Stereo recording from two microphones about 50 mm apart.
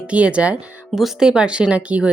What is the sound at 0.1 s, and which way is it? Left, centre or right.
Speech, right.